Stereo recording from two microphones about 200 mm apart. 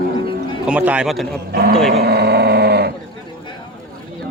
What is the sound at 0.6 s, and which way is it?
Speech, 5° right (ahead or behind).